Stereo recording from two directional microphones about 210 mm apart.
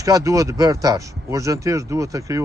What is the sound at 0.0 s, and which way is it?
Speech, 15° right (ahead or behind).